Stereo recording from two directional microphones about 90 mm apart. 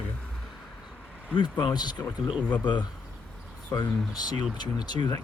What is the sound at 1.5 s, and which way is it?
Speech, 50° left (ahead or behind).